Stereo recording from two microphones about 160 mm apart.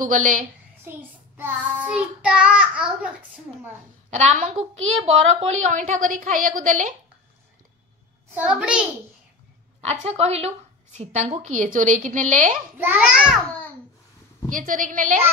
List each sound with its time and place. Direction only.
0.0 s a woman's voice: 55° right (ahead or behind)
0.8 s child singing: 10° right (ahead or behind)
4.1 s a woman's voice: 50° right (ahead or behind)
8.4 s a child's voice: 5° right (ahead or behind)
9.8 s a woman's voice: 40° right (ahead or behind)
12.7 s child singing: 10° right (ahead or behind)
14.5 s a woman's voice: 55° right (ahead or behind)